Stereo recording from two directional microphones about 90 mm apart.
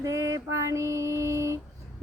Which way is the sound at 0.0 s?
35° right (ahead or behind).